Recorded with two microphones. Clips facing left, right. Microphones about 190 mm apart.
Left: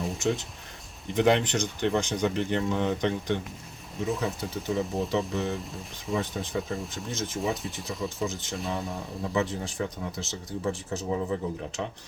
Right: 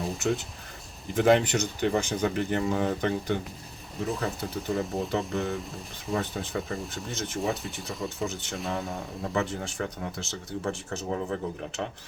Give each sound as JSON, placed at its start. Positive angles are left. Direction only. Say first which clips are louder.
{"t": 0.0, "sound": "speech", "louder": "even", "side_deg": 0}